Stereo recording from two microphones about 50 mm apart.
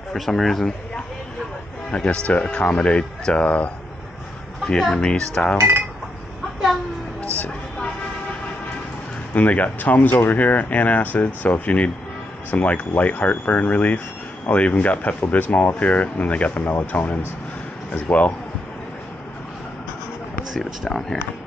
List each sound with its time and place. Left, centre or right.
0.1 s speech: centre
1.9 s speech: left
4.7 s speech: centre
5.0 s speech: left
9.3 s speech: left
20.5 s speech: centre